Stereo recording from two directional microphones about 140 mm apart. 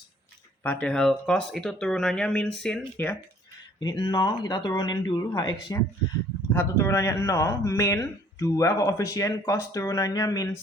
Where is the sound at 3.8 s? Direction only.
30° left (ahead or behind).